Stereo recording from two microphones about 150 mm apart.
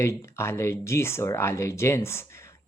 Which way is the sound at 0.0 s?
15° left (ahead or behind).